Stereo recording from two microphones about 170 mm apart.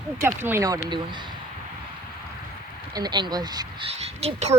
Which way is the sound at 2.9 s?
25° right (ahead or behind).